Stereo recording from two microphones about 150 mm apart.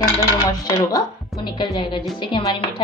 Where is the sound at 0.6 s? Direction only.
25° left (ahead or behind).